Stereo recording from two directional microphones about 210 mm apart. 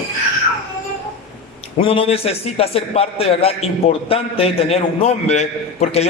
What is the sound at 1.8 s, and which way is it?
A man's voice, 25° left (ahead or behind).